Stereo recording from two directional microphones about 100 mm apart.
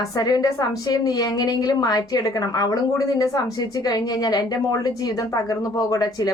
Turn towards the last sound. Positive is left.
turn(degrees=40)  # may be behind; listen again after turning